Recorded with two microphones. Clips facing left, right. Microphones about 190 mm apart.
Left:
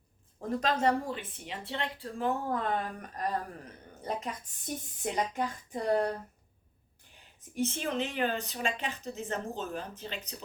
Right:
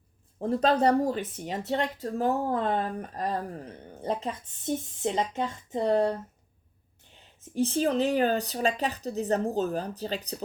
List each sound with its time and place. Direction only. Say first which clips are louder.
0.3 s speech: right 7 dB; 35° right (ahead or behind)
2.5 s a woman's voice: right 4 dB; 30° right (ahead or behind)
7.4 s speech: right 7 dB; 35° right (ahead or behind)